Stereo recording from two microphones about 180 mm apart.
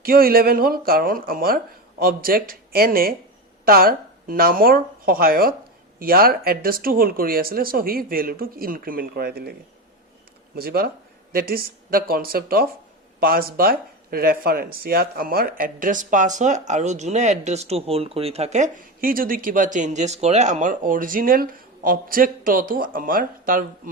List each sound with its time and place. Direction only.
0.0 s speech: 55° right (ahead or behind)